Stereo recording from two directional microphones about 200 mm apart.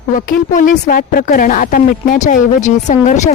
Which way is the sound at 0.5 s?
40° left (ahead or behind).